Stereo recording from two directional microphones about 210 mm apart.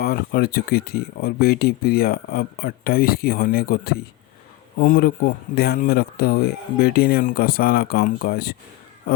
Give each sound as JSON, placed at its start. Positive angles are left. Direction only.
{"t": 0.0, "sound": "speech", "side_deg": 45}